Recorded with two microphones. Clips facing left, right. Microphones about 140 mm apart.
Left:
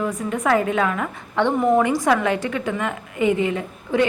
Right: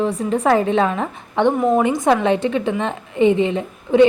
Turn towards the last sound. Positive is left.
turn(degrees=-20)  # may be behind; listen again after turning